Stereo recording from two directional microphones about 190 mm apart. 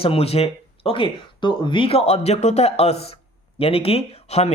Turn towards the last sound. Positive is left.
turn(degrees=35)  # may be behind; listen again after turning